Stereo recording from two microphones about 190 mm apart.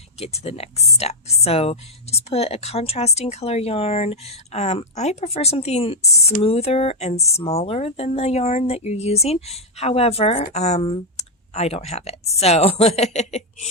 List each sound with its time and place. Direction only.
0.2 s speech: 35° left (ahead or behind)